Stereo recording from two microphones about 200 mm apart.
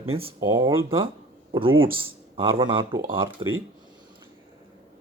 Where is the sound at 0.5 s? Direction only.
25° right (ahead or behind).